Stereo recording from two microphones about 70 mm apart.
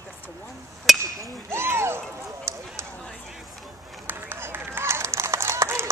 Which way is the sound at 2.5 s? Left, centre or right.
Right.